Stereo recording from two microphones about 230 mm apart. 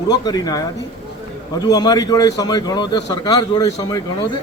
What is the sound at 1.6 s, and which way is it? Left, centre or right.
Music, centre.